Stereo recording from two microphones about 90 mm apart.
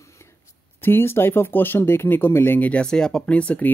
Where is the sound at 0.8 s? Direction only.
25° left (ahead or behind).